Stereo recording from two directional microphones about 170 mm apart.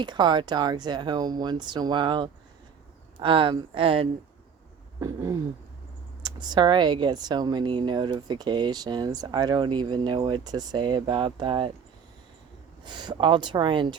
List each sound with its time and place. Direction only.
0.0 s speech: 25° right (ahead or behind)
4.9 s speech: 20° right (ahead or behind)
12.8 s speech: 25° right (ahead or behind)